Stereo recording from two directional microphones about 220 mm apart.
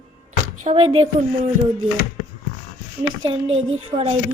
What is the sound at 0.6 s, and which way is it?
Speech, 30° right (ahead or behind).